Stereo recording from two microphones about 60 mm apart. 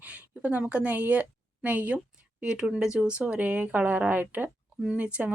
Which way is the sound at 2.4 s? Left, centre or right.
Centre.